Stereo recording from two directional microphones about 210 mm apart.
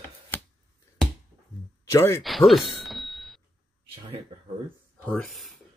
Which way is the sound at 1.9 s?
10° left (ahead or behind).